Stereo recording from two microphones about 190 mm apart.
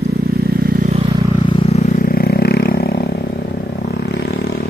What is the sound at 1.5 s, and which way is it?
Vehicle, 30° left (ahead or behind).